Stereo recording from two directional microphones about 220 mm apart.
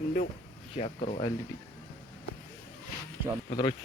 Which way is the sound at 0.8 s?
30° left (ahead or behind).